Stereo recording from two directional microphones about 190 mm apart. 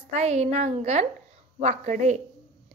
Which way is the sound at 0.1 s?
35° right (ahead or behind).